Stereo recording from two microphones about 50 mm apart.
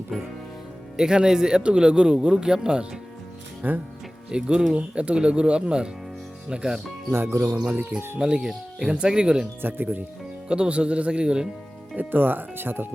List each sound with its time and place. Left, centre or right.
0.1 s speech: centre
0.9 s a man's voice: centre
3.6 s speech: right
4.3 s a man's voice: centre
7.1 s speech: right
7.7 s speech: right
8.2 s a man's voice: centre
9.6 s speech: right
10.5 s speech: right
11.9 s speech: right